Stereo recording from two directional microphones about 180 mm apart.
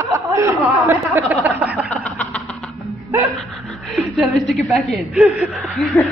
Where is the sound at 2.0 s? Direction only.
10° left (ahead or behind).